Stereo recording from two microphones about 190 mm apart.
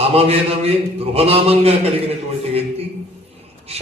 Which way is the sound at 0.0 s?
30° right (ahead or behind).